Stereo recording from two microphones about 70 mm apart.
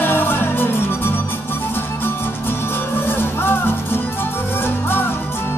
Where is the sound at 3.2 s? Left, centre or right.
Left.